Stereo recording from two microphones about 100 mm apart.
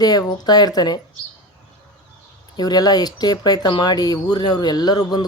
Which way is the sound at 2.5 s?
40° left (ahead or behind).